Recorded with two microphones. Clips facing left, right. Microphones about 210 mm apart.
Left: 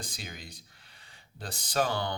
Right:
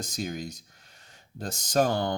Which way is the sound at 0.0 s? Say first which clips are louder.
Right 10 dB; 45° right (ahead or behind).